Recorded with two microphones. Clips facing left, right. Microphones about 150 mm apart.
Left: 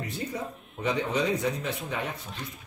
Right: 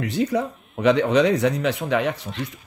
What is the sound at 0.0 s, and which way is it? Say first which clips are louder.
Speech: right 11 dB; 80° right.